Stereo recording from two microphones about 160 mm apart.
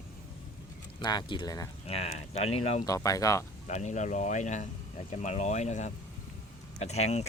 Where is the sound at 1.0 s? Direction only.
25° left (ahead or behind).